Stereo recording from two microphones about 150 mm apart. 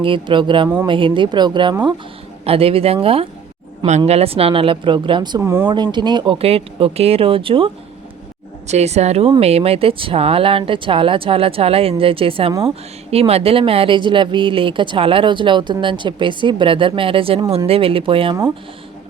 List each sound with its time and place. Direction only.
0.0 s speech: 35° right (ahead or behind)
5.4 s speech: 15° right (ahead or behind)
5.6 s speech: 30° right (ahead or behind)
8.6 s speech: 45° right (ahead or behind)